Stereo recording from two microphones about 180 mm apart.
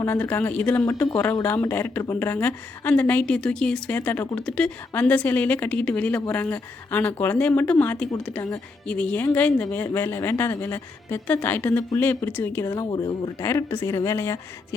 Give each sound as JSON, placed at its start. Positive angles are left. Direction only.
{"t": 0.0, "sound": "speech", "side_deg": 15}
{"t": 8.1, "sound": "speech", "side_deg": 20}
{"t": 8.9, "sound": "speech", "side_deg": 5}